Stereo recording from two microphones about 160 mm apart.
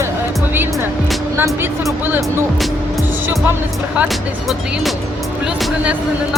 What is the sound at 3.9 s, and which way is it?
Speech, 5° right (ahead or behind).